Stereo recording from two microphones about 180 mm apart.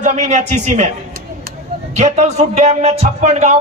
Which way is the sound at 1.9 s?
40° right (ahead or behind).